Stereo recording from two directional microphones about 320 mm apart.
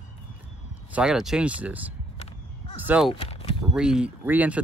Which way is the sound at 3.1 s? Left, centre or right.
Centre.